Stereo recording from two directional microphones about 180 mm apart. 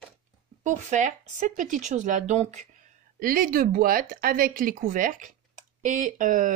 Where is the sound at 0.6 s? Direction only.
40° right (ahead or behind).